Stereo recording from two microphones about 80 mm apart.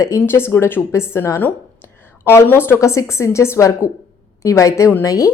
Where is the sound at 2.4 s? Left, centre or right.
Left.